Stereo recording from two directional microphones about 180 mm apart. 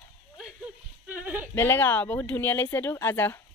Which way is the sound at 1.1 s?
10° right (ahead or behind).